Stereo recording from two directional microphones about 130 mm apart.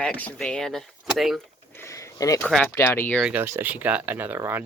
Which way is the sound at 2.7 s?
15° left (ahead or behind).